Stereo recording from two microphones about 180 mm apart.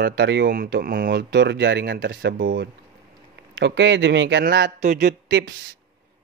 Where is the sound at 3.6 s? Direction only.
75° right (ahead or behind).